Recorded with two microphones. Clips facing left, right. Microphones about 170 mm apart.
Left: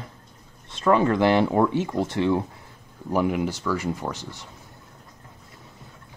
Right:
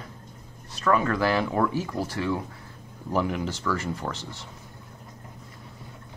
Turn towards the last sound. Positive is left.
turn(degrees=15)  # may be behind; listen again after turning